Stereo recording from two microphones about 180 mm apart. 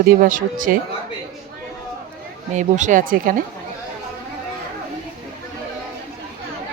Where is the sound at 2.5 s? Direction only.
45° right (ahead or behind).